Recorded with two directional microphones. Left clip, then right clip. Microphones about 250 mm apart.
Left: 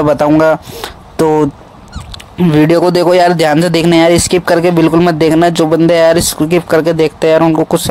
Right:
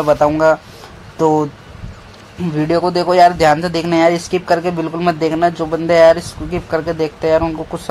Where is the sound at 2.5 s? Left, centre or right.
Left.